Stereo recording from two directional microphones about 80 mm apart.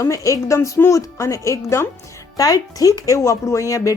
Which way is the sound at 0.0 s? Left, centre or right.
Left.